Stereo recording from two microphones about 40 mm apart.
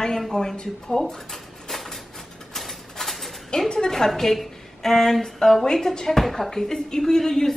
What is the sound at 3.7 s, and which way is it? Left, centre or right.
A woman's voice, centre.